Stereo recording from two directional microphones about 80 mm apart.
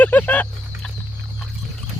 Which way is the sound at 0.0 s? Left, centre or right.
Left.